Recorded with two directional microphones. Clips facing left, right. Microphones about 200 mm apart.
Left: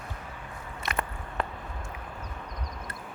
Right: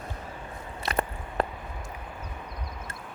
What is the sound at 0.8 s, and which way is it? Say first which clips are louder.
Biting: right 4 dB; 35° right (ahead or behind).